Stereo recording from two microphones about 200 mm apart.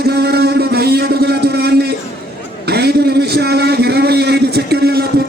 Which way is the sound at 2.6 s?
55° right (ahead or behind).